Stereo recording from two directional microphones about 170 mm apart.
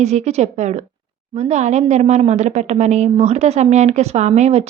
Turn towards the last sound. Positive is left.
turn(degrees=-40)  # may be behind; listen again after turning